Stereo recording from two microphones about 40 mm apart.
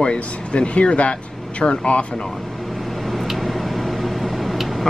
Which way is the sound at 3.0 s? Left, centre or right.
Centre.